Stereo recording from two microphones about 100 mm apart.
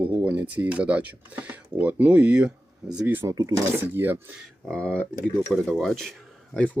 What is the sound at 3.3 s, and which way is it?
Speech, 35° right (ahead or behind).